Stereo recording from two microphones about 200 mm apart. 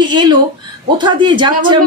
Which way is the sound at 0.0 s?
25° right (ahead or behind).